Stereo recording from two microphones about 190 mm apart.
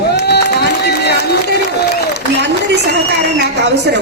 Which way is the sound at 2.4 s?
60° right (ahead or behind).